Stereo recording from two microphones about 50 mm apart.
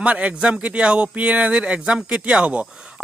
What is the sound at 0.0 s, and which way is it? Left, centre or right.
Speech, right.